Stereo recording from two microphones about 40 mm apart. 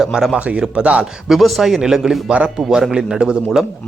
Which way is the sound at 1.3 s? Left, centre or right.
Centre.